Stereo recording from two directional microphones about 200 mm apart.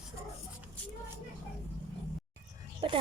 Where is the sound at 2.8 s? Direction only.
30° right (ahead or behind).